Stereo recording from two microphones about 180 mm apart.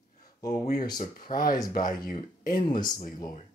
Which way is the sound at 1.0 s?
50° left (ahead or behind).